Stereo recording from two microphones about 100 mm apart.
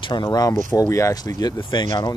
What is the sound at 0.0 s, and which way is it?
Speech, 45° left (ahead or behind).